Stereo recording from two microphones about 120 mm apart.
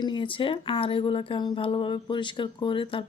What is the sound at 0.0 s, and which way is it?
A woman's voice, 45° left (ahead or behind).